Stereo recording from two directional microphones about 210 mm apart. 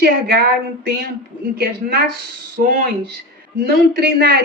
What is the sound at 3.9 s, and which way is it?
Speech, 50° right (ahead or behind).